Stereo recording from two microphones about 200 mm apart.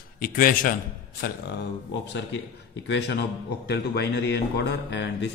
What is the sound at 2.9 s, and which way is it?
A man's voice, 60° left (ahead or behind).